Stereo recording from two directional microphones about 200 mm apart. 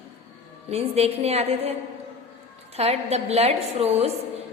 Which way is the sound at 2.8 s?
30° right (ahead or behind).